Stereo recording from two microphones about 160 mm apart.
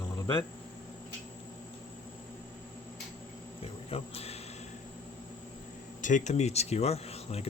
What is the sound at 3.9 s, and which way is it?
Speech, 40° left (ahead or behind).